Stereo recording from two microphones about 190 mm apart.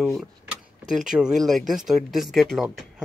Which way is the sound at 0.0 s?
Centre (ahead or behind).